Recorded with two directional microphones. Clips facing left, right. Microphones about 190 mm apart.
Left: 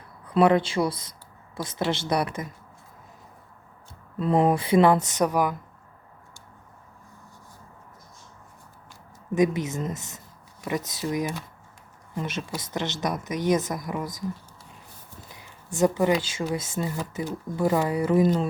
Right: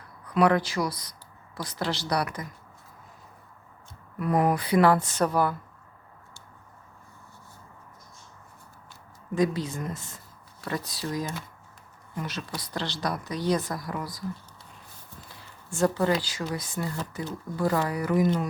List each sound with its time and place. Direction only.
0.3 s a woman's voice: 25° left (ahead or behind)
4.2 s a woman's voice: 25° left (ahead or behind)
9.3 s a woman's voice: 20° left (ahead or behind)
12.1 s a woman's voice: 25° left (ahead or behind)
15.3 s a woman's voice: 20° left (ahead or behind)